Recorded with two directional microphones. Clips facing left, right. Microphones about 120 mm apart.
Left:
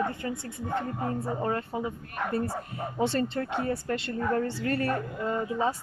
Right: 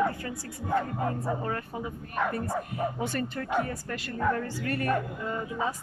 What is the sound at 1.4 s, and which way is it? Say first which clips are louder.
A woman's voice: left 3 dB; 25° left (ahead or behind).